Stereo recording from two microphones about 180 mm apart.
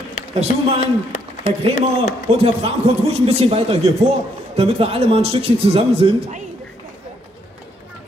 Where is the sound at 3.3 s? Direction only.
35° right (ahead or behind).